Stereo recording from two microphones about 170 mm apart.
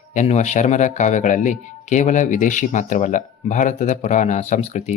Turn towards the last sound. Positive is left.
turn(degrees=45)  # may be behind; listen again after turning